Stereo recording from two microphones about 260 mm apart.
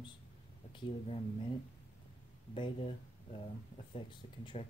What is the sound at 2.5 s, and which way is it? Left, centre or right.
Speech, left.